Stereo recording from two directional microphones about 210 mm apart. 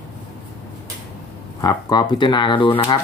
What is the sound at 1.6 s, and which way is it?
Speech, 20° left (ahead or behind).